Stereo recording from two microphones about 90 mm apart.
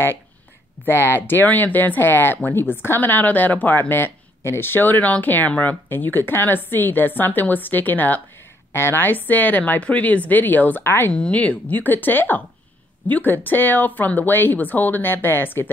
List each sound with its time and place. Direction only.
0.8 s speech: 25° left (ahead or behind)